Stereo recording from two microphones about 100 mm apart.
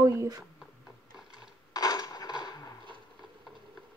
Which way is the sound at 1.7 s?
40° left (ahead or behind).